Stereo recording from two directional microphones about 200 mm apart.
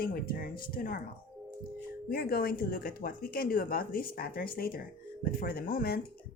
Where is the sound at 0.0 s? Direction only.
45° left (ahead or behind).